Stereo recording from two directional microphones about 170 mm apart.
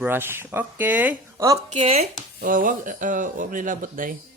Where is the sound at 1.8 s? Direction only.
40° right (ahead or behind).